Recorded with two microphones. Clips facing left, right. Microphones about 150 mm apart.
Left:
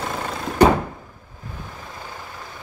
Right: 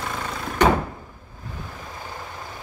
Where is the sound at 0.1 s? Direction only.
30° left (ahead or behind).